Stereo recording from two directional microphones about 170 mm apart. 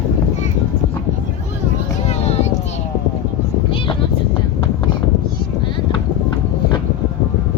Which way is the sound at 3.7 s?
30° left (ahead or behind).